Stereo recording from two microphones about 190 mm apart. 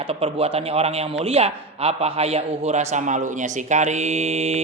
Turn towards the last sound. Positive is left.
turn(degrees=-35)  # may be behind; listen again after turning